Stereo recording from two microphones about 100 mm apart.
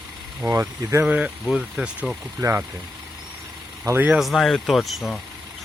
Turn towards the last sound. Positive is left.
turn(degrees=0)  # may be behind; listen again after turning